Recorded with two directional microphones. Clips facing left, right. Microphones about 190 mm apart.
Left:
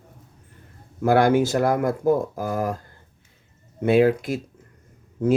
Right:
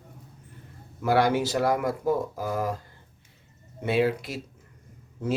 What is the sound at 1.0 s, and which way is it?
Speech, 50° left (ahead or behind).